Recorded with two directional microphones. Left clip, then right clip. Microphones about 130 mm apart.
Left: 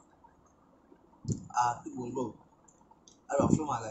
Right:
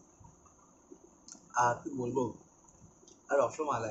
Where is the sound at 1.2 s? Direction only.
30° left (ahead or behind).